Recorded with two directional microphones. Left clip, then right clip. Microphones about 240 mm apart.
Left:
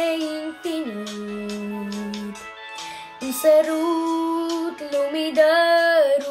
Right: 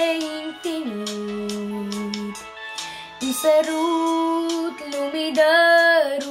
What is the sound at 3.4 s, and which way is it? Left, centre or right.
Child singing, centre.